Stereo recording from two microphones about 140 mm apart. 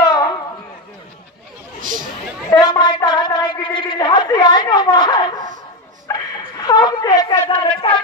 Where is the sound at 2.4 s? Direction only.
25° left (ahead or behind).